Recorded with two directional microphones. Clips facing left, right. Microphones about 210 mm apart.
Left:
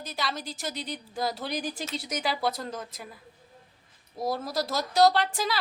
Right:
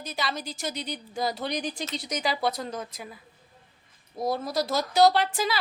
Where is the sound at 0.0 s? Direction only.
Centre (ahead or behind).